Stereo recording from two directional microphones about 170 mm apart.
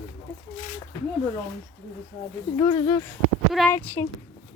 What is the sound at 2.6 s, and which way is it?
Speech, 30° left (ahead or behind).